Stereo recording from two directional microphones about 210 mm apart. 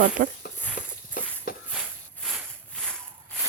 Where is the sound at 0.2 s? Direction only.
40° right (ahead or behind).